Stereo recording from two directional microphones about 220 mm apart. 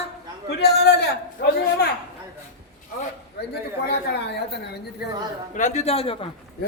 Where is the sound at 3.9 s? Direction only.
50° left (ahead or behind).